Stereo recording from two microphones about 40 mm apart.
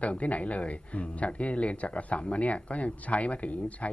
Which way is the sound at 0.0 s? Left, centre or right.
Left.